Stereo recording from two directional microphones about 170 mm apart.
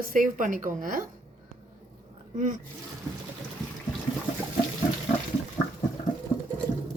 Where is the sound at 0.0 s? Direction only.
55° right (ahead or behind).